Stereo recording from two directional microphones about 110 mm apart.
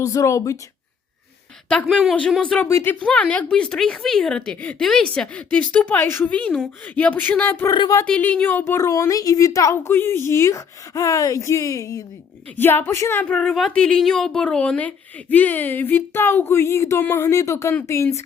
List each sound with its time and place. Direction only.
0.0 s a woman's voice: 30° left (ahead or behind)
1.9 s speech: 5° right (ahead or behind)
2.4 s speech: 10° left (ahead or behind)
2.6 s a woman's voice: 20° left (ahead or behind)
12.5 s a woman's voice: 20° left (ahead or behind)